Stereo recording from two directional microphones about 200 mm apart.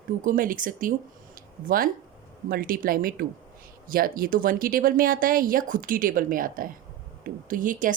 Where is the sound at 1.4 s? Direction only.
45° right (ahead or behind).